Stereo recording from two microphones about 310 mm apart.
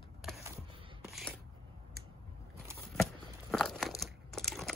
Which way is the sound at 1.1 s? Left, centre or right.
Centre.